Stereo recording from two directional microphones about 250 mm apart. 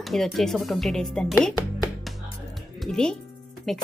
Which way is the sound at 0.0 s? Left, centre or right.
Centre.